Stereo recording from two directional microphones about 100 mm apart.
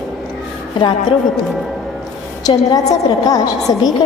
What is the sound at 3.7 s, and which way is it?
Speech, 40° left (ahead or behind).